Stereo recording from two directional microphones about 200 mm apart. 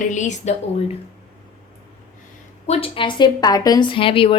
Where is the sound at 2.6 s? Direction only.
30° left (ahead or behind).